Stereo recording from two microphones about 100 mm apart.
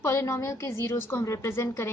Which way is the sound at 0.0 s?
30° left (ahead or behind).